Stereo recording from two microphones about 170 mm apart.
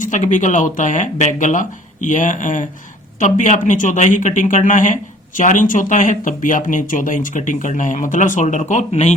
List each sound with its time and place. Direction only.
0.0 s speech: 45° left (ahead or behind)